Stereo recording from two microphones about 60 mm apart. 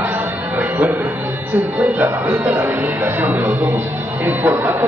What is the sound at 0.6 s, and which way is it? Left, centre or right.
Speech, right.